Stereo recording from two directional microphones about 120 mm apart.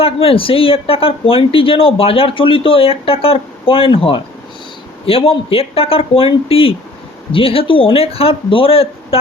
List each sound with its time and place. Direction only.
0.0 s speech: 50° left (ahead or behind)